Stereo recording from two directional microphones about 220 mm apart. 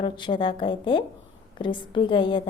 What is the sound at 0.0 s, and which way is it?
A woman's voice, 20° left (ahead or behind).